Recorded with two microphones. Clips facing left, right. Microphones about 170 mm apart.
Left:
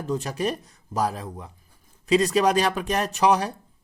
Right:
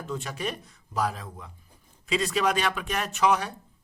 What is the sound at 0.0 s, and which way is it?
Speech, 40° left (ahead or behind).